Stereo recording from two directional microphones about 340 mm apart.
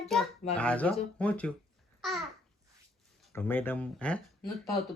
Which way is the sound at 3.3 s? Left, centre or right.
Centre.